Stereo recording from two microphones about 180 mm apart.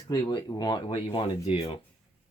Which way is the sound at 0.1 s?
20° left (ahead or behind).